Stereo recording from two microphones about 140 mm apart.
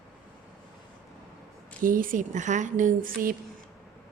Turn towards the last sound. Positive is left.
turn(degrees=-75)  # may be behind; listen again after turning